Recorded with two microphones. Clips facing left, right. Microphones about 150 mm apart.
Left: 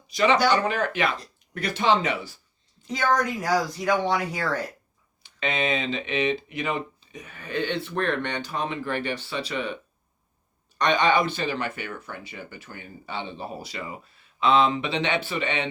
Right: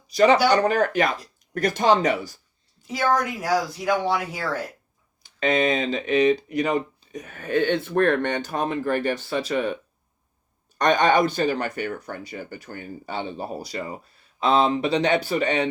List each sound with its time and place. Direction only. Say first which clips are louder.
0.1 s speech: right 4 dB; 40° right (ahead or behind)
2.8 s speech: right 1 dB; 5° right (ahead or behind)
5.2 s speech: right 6 dB; 40° right (ahead or behind)
10.8 s speech: right 3 dB; 45° right (ahead or behind)